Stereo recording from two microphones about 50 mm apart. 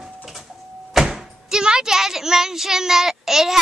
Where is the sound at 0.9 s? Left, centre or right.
Centre.